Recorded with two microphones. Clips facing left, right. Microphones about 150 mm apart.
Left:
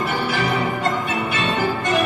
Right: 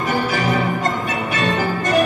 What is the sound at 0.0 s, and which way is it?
Music, 40° right (ahead or behind).